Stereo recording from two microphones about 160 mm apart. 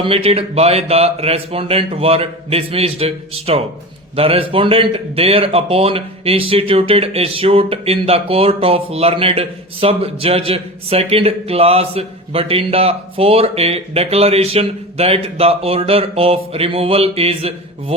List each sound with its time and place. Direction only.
0.0 s a man's voice: 35° right (ahead or behind)